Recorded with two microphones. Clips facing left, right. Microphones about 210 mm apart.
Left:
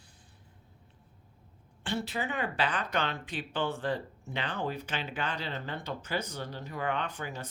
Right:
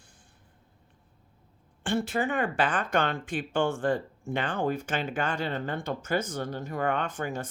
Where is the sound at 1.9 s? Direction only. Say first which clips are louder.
Right 6 dB; 50° right (ahead or behind).